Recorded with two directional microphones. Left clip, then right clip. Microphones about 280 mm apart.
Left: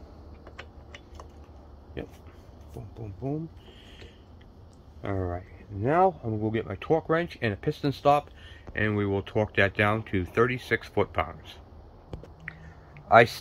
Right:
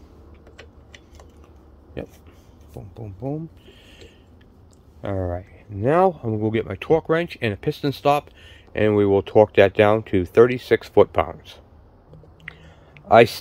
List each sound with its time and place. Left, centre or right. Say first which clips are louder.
3.0 s speech: right 4 dB; right
5.0 s speech: right 6 dB; right
12.4 s a sound: right 3 dB; right